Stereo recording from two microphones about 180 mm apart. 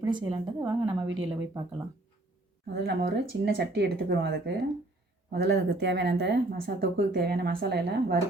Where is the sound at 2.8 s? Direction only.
65° right (ahead or behind).